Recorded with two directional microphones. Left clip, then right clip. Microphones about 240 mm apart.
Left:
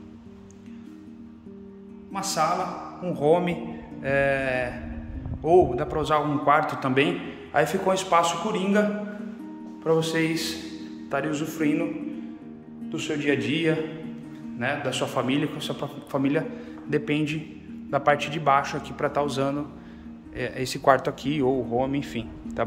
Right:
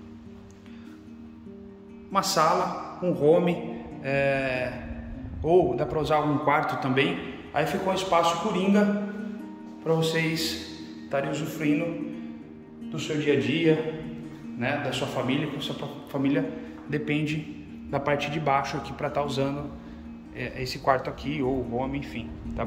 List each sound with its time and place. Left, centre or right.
2.1 s music: centre
3.1 s a man's voice: centre
9.8 s a man's voice: centre
12.9 s a man's voice: centre